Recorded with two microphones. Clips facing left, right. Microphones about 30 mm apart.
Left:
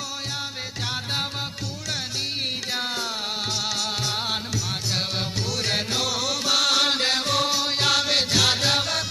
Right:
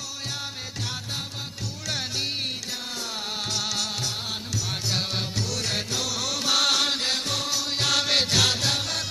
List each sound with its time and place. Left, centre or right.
3.6 s music: centre
4.9 s music: centre
5.5 s music: left
6.2 s music: centre
6.7 s music: centre
7.0 s music: left
7.7 s music: centre
7.9 s music: centre
8.7 s music: left